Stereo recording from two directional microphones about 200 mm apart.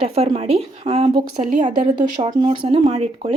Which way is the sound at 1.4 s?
40° right (ahead or behind).